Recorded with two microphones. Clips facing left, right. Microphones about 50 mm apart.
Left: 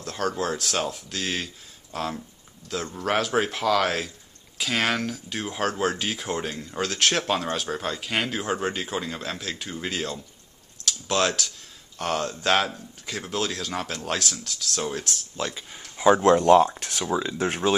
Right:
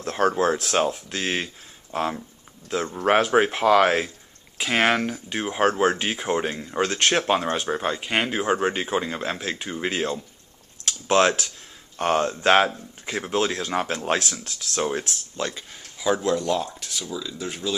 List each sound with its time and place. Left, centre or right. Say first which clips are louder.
0.0 s speech: right 6 dB; right
6.7 s speech: right 3 dB; centre
15.3 s speech: right 3 dB; centre
15.8 s a sound: left 5 dB; left
16.2 s speech: left 7 dB; left